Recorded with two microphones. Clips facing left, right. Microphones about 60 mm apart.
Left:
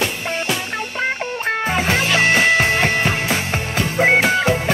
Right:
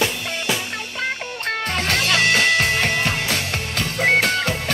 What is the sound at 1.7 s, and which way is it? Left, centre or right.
Music, centre.